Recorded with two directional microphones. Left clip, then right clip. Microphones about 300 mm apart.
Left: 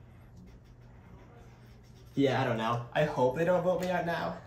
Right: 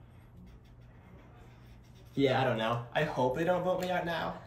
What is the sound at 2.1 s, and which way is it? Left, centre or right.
Speech, centre.